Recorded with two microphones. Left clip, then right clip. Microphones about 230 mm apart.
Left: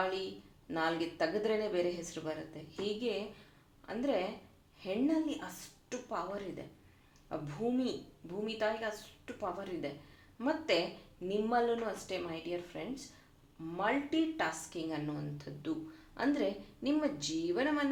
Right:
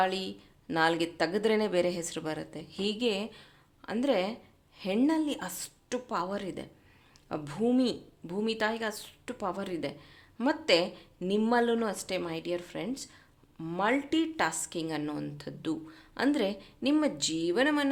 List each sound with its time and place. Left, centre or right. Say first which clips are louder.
0.7 s a woman's voice: right 7 dB; right